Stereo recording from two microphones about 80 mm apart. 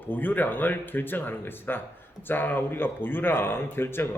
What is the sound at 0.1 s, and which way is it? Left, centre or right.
A man's voice, left.